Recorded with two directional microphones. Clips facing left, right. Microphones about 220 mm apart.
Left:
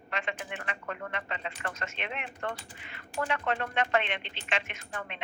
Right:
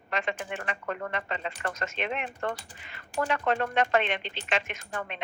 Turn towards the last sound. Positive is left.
turn(degrees=-40)  # may be behind; listen again after turning